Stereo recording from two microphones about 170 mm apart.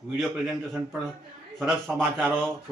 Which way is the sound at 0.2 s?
Centre (ahead or behind).